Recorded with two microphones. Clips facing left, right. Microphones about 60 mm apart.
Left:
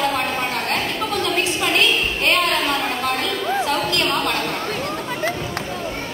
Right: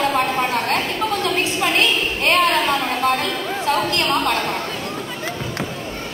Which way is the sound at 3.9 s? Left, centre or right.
Right.